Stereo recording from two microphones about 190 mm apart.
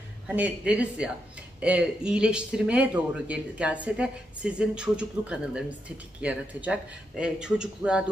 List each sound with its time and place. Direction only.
0.3 s a man's voice: 10° right (ahead or behind)